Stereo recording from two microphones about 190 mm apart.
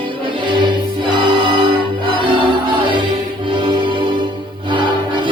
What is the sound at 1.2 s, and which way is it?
Music, 25° right (ahead or behind).